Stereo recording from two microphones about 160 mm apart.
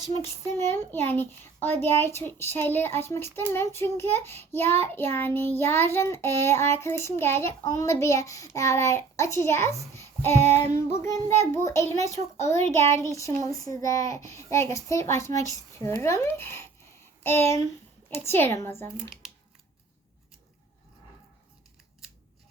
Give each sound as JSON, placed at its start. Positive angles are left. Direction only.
{"t": 0.4, "sound": "a child's voice", "side_deg": 15}